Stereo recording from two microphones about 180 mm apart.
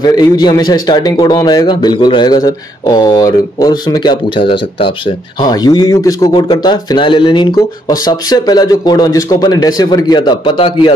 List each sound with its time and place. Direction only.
0.0 s a man's voice: 20° left (ahead or behind)